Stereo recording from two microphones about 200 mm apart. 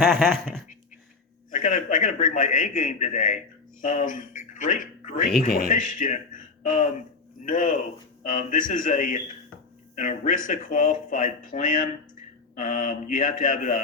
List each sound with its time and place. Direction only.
0.0 s speech: centre (ahead or behind)
1.5 s speech: 40° left (ahead or behind)